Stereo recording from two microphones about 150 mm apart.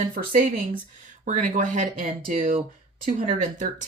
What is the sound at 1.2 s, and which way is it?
Speech, 60° right (ahead or behind).